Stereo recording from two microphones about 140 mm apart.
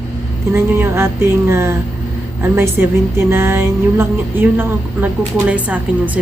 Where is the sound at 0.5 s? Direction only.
15° right (ahead or behind).